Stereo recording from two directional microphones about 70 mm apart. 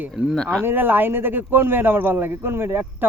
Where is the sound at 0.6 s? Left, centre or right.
Right.